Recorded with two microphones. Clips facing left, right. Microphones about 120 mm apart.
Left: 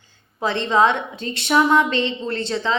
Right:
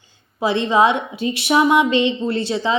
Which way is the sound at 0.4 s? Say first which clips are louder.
Right 2 dB; 10° right (ahead or behind).